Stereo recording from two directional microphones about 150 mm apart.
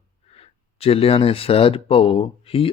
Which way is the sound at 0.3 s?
40° left (ahead or behind).